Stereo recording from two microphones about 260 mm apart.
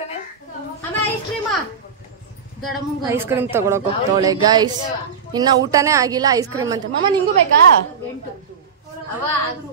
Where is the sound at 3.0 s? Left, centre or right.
Centre.